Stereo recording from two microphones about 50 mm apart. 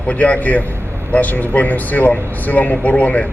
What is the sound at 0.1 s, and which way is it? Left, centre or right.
A man's voice, left.